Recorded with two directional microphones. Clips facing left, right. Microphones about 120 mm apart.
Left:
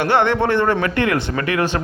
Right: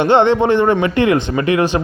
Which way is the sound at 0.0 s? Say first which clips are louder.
Right 5 dB; 20° right (ahead or behind).